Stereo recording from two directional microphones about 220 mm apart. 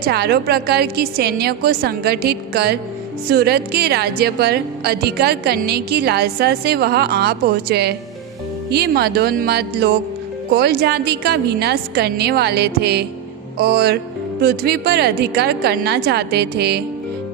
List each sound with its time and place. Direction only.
0.0 s a woman's voice: 45° right (ahead or behind)